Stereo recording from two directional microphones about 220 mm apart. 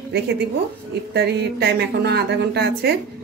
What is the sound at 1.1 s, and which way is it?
A woman's voice, 50° right (ahead or behind).